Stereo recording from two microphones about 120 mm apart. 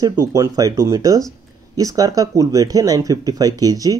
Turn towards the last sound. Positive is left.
turn(degrees=-30)  # may be behind; listen again after turning